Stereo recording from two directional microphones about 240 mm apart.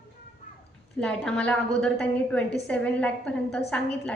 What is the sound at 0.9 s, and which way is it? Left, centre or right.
A woman's voice, centre.